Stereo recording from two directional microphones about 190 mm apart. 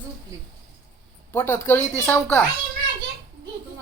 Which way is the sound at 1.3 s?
10° left (ahead or behind).